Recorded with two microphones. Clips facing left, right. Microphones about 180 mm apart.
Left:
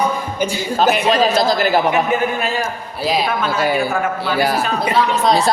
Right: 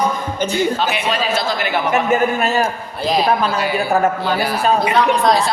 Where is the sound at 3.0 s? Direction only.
5° left (ahead or behind).